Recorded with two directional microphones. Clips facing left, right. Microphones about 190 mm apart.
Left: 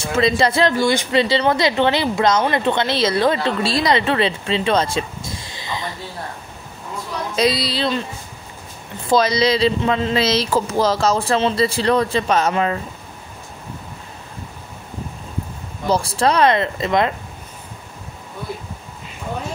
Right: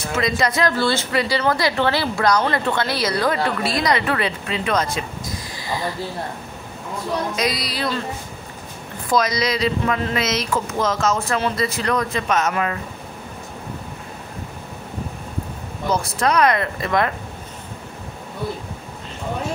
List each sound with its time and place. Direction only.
0.0 s speech: 30° left (ahead or behind)
0.7 s speech: 15° left (ahead or behind)
7.3 s speech: 30° left (ahead or behind)
9.1 s speech: 30° left (ahead or behind)
15.9 s speech: 30° left (ahead or behind)